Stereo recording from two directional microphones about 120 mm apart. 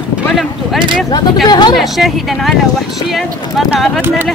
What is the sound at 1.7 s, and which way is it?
Speech, centre (ahead or behind).